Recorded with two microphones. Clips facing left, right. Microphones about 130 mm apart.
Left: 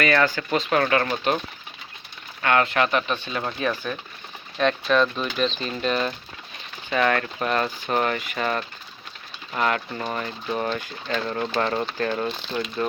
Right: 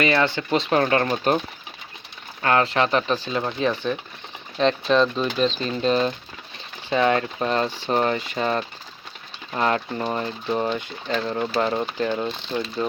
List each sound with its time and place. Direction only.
0.0 s speech: 25° right (ahead or behind)
2.4 s speech: 30° right (ahead or behind)
6.9 s speech: 20° right (ahead or behind)